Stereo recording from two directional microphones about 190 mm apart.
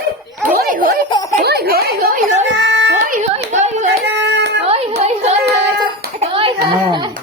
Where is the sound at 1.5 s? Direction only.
55° right (ahead or behind).